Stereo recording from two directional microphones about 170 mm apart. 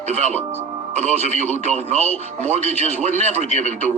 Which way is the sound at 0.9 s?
45° right (ahead or behind).